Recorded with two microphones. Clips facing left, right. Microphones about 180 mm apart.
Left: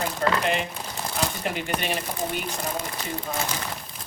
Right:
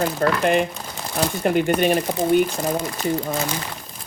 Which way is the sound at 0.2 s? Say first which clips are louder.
Right 3 dB; 55° right (ahead or behind).